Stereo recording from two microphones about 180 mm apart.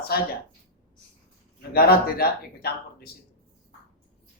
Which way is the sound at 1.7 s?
60° left (ahead or behind).